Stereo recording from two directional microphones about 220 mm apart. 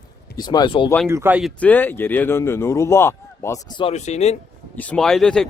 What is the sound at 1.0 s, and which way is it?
Speech, 10° right (ahead or behind).